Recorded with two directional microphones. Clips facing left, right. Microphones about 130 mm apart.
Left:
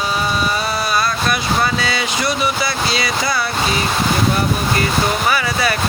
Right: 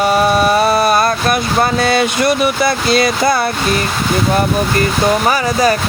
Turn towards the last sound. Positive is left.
turn(degrees=-40)  # may be behind; listen again after turning